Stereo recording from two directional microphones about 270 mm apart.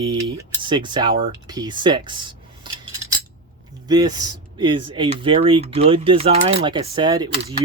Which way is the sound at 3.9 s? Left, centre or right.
Centre.